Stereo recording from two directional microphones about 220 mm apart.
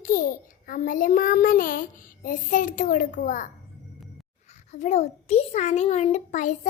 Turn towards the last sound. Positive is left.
turn(degrees=35)  # may be behind; listen again after turning